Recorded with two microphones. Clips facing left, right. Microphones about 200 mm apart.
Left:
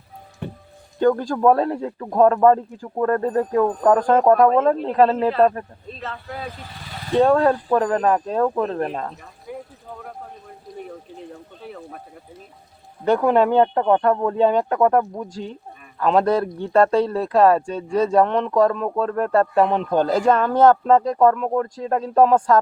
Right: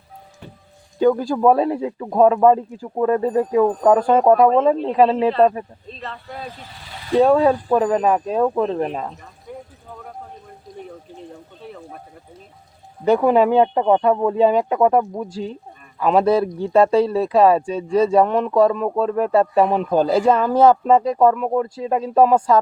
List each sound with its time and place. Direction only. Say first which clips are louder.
0.4 s speech: left 10 dB; 60° left (ahead or behind)
0.9 s speech: right 2 dB; 10° right (ahead or behind)
9.5 s a sound: left 2 dB; 5° left (ahead or behind)
11.2 s speech: even; centre (ahead or behind)
13.1 s speech: right 2 dB; 10° right (ahead or behind)